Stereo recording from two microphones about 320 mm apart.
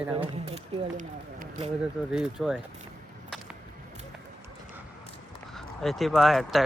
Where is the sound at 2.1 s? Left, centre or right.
Centre.